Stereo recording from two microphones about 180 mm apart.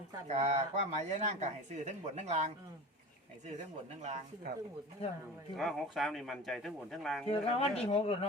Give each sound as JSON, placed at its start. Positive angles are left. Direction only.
{"t": 0.3, "sound": "speech", "side_deg": -35}
{"t": 5.0, "sound": "speech", "side_deg": 35}
{"t": 5.5, "sound": "speech", "side_deg": 0}
{"t": 7.4, "sound": "speech", "side_deg": 35}